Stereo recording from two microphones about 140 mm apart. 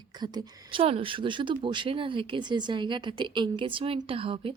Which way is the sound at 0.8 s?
40° right (ahead or behind).